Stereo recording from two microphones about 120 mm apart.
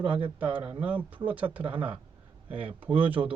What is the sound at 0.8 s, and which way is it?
Speech, 10° right (ahead or behind).